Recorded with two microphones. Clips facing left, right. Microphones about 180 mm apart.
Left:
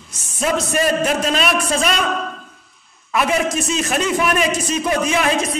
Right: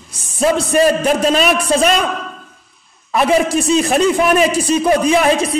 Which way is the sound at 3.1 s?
35° right (ahead or behind).